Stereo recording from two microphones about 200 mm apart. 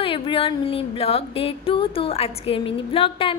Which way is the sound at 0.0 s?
25° left (ahead or behind).